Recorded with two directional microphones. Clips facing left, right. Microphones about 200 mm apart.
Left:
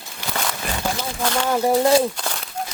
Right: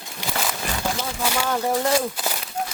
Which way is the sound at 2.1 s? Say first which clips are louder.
Right 1 dB; 5° right (ahead or behind).